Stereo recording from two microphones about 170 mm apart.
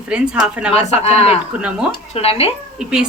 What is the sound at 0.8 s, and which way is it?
Speech, 40° left (ahead or behind).